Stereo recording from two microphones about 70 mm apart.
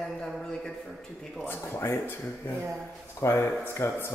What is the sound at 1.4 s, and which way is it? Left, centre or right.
Speech, left.